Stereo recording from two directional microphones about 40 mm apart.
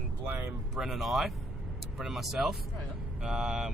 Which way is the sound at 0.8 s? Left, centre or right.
Centre.